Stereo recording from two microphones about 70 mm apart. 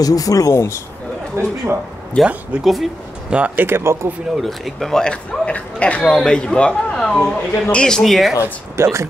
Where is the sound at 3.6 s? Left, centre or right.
Right.